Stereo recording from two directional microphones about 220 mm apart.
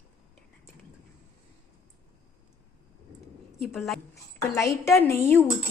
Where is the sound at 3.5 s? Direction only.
Centre (ahead or behind).